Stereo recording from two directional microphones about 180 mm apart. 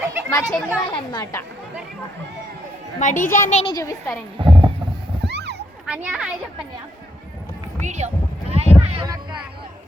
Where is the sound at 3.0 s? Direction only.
45° left (ahead or behind).